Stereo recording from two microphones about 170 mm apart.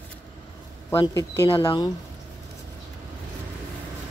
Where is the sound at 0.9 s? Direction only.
25° left (ahead or behind).